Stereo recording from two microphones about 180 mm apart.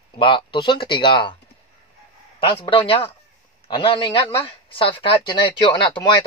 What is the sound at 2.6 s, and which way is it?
Speech, 30° left (ahead or behind).